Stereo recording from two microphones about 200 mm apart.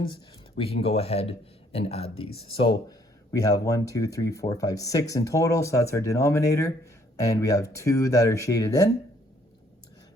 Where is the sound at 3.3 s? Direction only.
15° left (ahead or behind).